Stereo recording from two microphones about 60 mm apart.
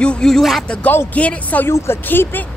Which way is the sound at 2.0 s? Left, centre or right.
Left.